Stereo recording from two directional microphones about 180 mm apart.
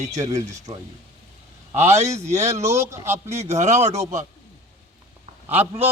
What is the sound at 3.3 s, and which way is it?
Speech, 40° right (ahead or behind).